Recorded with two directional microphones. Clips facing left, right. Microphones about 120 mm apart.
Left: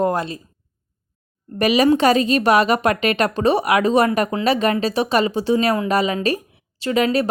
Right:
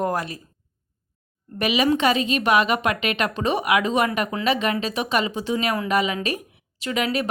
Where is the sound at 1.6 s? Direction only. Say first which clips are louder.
Left 5 dB; 40° left (ahead or behind).